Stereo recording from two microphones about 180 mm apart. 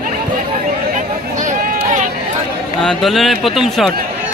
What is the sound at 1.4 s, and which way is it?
Run, 45° right (ahead or behind).